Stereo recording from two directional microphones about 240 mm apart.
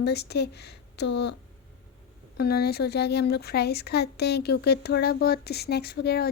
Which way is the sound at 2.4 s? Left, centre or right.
Left.